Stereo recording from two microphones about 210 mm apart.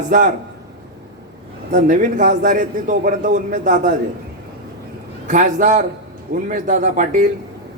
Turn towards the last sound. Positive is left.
turn(degrees=-35)  # may be behind; listen again after turning